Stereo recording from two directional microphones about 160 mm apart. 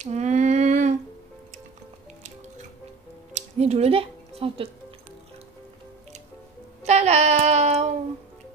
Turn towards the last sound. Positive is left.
turn(degrees=-45)  # may be behind; listen again after turning